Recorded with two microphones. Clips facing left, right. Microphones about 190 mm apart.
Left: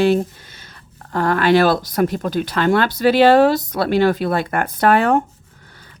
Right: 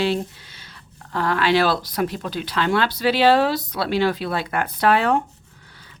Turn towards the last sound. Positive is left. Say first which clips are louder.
# left 3 dB
turn(degrees=45)  # may be behind; listen again after turning